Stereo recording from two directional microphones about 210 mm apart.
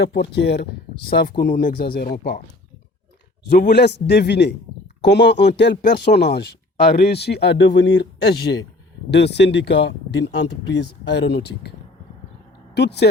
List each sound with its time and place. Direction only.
0.0 s speech: 55° left (ahead or behind)
3.6 s speech: 50° left (ahead or behind)
12.7 s speech: 50° left (ahead or behind)